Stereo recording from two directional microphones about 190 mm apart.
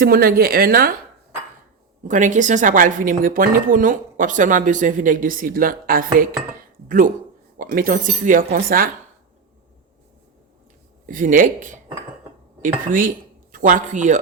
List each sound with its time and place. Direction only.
0.0 s a woman's voice: 50° right (ahead or behind)
2.0 s a woman's voice: 40° right (ahead or behind)
11.0 s a woman's voice: 45° right (ahead or behind)